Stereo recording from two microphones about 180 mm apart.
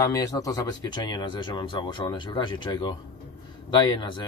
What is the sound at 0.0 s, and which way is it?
Speech, 20° left (ahead or behind).